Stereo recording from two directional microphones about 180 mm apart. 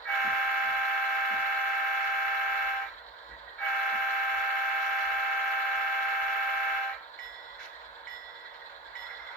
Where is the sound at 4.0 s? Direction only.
Centre (ahead or behind).